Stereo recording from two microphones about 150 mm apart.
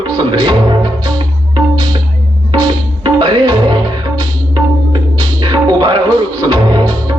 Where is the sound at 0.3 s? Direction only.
30° right (ahead or behind).